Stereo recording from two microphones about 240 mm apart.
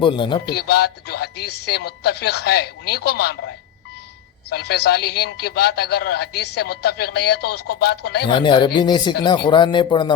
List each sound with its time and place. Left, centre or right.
0.0 s speech: centre
0.5 s a man's voice: left
8.3 s speech: centre